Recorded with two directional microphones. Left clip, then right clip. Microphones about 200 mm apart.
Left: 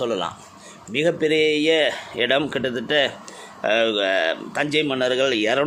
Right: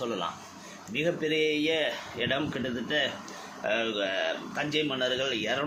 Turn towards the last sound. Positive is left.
turn(degrees=55)  # may be behind; listen again after turning